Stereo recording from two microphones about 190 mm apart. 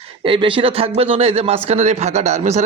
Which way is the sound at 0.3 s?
25° right (ahead or behind).